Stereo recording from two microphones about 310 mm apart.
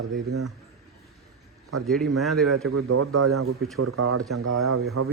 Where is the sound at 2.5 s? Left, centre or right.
Right.